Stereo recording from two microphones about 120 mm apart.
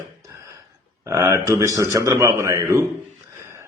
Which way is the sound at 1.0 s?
25° right (ahead or behind).